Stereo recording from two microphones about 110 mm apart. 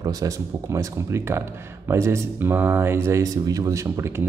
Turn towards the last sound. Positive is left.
turn(degrees=-25)  # may be behind; listen again after turning